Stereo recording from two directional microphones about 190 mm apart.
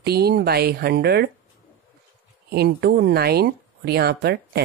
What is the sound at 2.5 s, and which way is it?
Speech, 60° right (ahead or behind).